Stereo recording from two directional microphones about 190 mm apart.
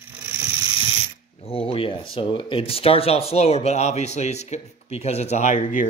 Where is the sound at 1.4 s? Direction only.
30° left (ahead or behind).